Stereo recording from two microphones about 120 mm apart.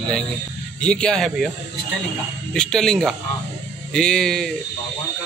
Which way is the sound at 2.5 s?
5° left (ahead or behind).